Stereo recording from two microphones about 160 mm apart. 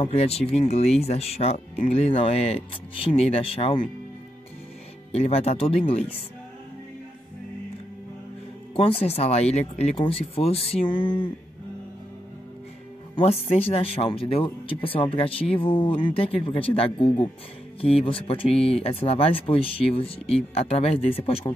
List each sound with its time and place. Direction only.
0.0 s speech: 40° left (ahead or behind)
5.1 s speech: 40° left (ahead or behind)
8.7 s speech: 35° left (ahead or behind)
13.1 s speech: 40° left (ahead or behind)